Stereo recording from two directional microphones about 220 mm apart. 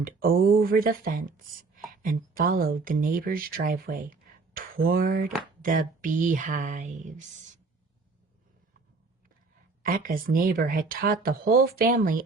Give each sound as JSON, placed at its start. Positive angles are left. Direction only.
{"t": 0.0, "sound": "speech", "side_deg": -40}
{"t": 9.8, "sound": "speech", "side_deg": -40}